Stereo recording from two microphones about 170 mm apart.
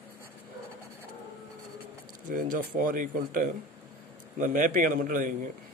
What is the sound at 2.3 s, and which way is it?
A man's voice, 55° right (ahead or behind).